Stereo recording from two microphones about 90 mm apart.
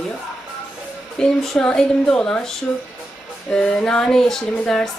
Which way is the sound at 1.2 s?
5° left (ahead or behind).